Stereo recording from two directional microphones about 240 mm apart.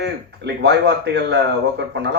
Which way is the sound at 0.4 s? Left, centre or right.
Right.